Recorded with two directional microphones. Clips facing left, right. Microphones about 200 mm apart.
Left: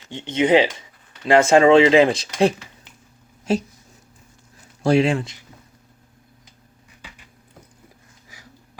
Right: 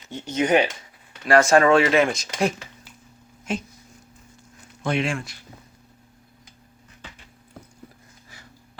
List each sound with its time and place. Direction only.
0.3 s speech: 25° left (ahead or behind)
4.8 s speech: 35° left (ahead or behind)